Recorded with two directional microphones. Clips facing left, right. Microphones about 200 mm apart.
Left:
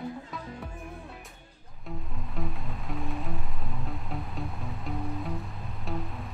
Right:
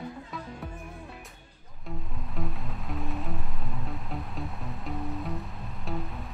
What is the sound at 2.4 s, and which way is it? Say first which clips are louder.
Music: even; centre (ahead or behind).